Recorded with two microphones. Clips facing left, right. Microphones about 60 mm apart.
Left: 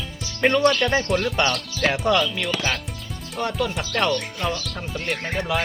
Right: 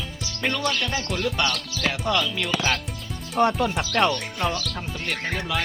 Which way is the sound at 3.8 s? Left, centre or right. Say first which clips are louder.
Right 1 dB; centre.